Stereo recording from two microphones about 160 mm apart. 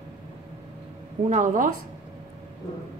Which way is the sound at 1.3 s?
55° right (ahead or behind).